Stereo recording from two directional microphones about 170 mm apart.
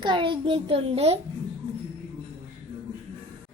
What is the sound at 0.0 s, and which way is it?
A child's voice, 30° right (ahead or behind).